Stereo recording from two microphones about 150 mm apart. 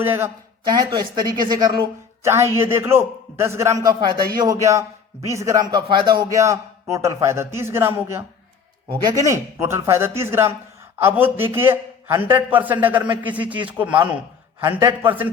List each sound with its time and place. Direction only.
0.0 s a man's voice: 15° right (ahead or behind)
0.7 s a man's voice: 30° right (ahead or behind); by 15.3 s 10° right (ahead or behind)